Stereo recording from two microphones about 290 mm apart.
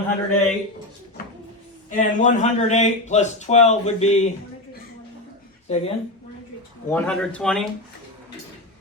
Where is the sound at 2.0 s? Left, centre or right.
Left.